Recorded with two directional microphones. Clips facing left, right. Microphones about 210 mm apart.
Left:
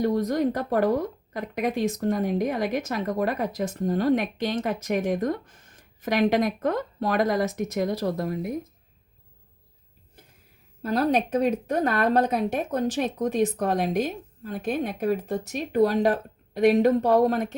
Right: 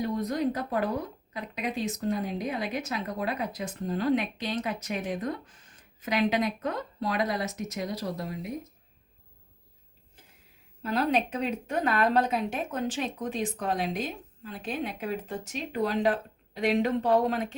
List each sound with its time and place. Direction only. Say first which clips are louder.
0.9 s speech: left 6 dB; 45° left (ahead or behind)
10.8 s speech: left 4 dB; 40° left (ahead or behind)